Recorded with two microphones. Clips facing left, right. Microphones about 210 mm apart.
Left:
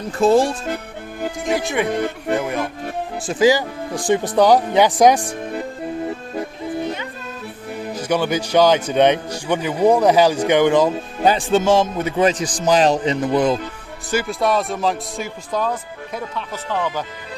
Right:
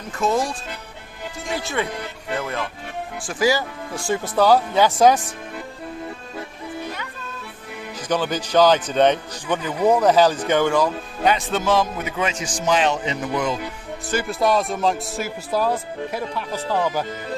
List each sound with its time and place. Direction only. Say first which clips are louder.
0.2 s speech: left 7 dB; 30° left (ahead or behind)
1.2 s music: left 8 dB; 50° left (ahead or behind)
1.5 s speech: left 3 dB; 15° left (ahead or behind)
1.9 s speech: left 8 dB; 50° left (ahead or behind)
2.4 s speech: left 5 dB; 15° left (ahead or behind)
6.8 s music: left 6 dB; 20° left (ahead or behind)
7.9 s speech: left 3 dB; 10° left (ahead or behind); by 13.6 s 35° left (ahead or behind)
14.3 s speech: right 2 dB; centre (ahead or behind)